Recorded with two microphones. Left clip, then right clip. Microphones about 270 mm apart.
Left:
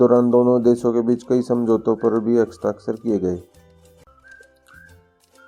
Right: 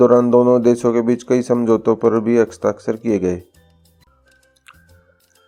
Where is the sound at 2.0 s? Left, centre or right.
Right.